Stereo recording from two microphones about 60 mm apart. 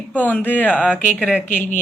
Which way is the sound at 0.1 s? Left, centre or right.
Left.